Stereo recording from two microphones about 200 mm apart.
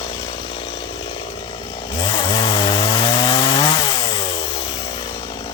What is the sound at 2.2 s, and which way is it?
Chainsaw, 25° left (ahead or behind).